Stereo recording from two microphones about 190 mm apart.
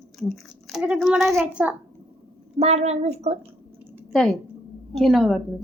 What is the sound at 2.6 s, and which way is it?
Speech, 35° right (ahead or behind).